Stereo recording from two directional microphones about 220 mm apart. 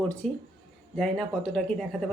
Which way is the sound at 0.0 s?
5° left (ahead or behind).